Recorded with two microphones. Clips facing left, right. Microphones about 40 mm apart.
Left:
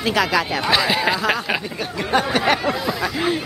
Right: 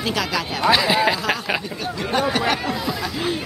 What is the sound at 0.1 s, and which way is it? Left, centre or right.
Speech, centre.